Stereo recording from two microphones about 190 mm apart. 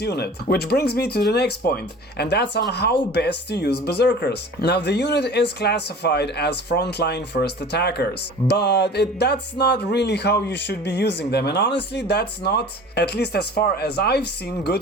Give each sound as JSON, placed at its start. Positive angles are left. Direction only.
{"t": 0.0, "sound": "speech", "side_deg": 60}